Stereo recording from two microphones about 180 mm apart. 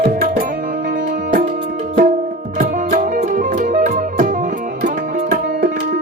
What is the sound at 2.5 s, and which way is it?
Music, 45° right (ahead or behind).